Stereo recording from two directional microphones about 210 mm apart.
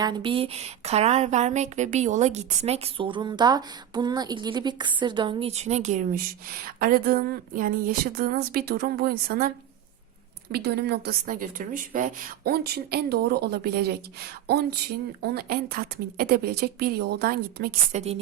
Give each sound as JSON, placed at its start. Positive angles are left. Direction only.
{"t": 0.0, "sound": "speech", "side_deg": -20}
{"t": 10.5, "sound": "speech", "side_deg": -50}
{"t": 14.4, "sound": "a sound", "side_deg": -50}
{"t": 15.2, "sound": "speech", "side_deg": -45}
{"t": 17.9, "sound": "speech", "side_deg": -30}